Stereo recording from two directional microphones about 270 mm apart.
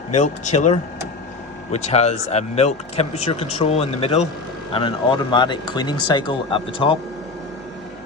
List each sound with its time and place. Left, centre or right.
0.1 s speech: left